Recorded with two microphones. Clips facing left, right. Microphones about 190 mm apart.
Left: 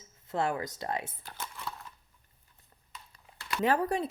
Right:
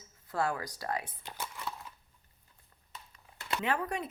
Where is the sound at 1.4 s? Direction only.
Centre (ahead or behind).